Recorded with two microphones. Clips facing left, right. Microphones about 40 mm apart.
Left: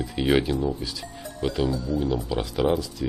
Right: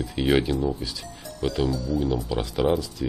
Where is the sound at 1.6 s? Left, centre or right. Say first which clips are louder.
Even; left.